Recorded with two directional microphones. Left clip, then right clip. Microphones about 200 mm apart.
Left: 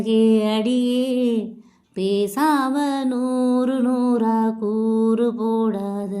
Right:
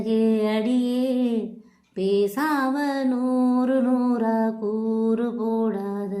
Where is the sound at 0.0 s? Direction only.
40° left (ahead or behind).